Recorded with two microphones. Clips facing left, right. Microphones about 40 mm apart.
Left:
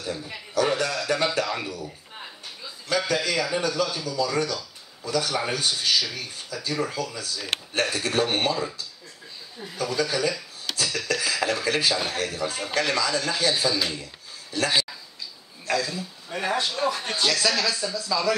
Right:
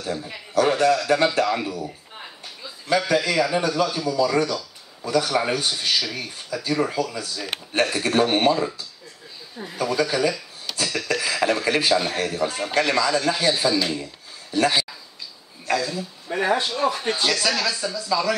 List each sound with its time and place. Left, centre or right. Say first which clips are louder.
0.0 s a man's voice: right 3 dB; centre
3.3 s speech: right 4 dB; centre
15.7 s speech: right 2 dB; centre